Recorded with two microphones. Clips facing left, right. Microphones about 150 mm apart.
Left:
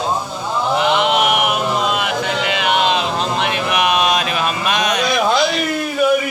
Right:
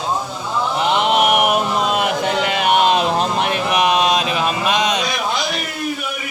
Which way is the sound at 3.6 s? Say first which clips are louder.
Right 1 dB; 30° right (ahead or behind).